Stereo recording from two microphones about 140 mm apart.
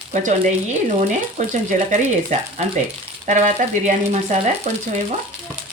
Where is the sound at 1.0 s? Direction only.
60° right (ahead or behind).